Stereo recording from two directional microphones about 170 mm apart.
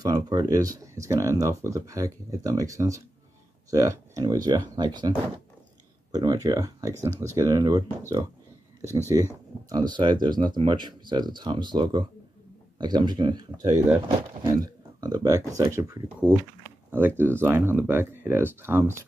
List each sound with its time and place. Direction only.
0.0 s speech: 25° right (ahead or behind)
6.1 s speech: 20° right (ahead or behind)
8.8 s speech: 15° right (ahead or behind)